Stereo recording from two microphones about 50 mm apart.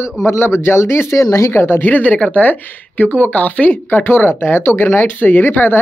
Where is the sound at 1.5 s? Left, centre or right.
Left.